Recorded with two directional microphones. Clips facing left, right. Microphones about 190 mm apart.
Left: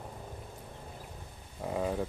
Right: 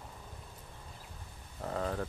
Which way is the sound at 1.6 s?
15° left (ahead or behind).